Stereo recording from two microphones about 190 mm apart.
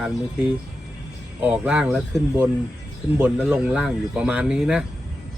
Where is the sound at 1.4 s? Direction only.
5° right (ahead or behind).